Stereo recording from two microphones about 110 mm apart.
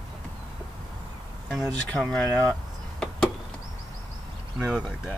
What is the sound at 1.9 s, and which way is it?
Speech, 5° left (ahead or behind).